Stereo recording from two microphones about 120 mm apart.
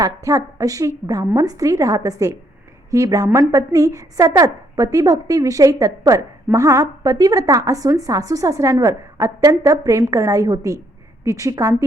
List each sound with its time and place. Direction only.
0.0 s a woman's voice: 25° right (ahead or behind)